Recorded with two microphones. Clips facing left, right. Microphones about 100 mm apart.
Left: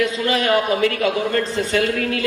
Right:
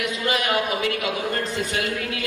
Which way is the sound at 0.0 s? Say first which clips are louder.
Left 5 dB; 35° left (ahead or behind).